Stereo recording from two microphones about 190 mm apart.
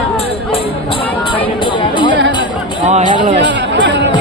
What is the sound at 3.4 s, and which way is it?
Music, 70° right (ahead or behind).